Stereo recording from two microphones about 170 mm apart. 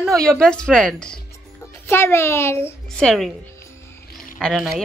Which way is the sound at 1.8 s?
15° left (ahead or behind).